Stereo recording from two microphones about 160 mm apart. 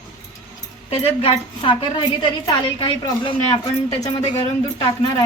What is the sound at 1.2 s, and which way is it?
A woman's voice, 30° left (ahead or behind).